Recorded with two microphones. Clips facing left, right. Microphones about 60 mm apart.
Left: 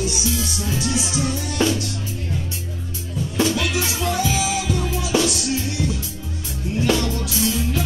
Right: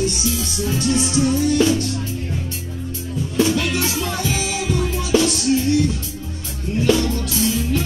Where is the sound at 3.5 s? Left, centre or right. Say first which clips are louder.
Right 2 dB; centre.